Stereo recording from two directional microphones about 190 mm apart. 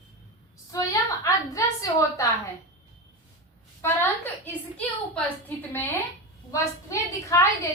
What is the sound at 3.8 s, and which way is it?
A woman's voice, 10° left (ahead or behind).